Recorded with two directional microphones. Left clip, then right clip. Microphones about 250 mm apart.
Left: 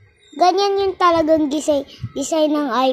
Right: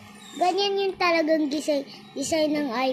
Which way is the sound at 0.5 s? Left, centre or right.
Left.